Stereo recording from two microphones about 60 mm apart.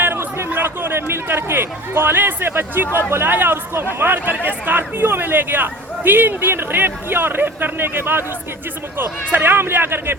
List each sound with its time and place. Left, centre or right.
0.0 s speech: right